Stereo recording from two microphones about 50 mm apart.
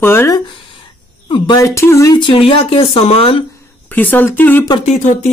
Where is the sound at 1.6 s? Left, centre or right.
Left.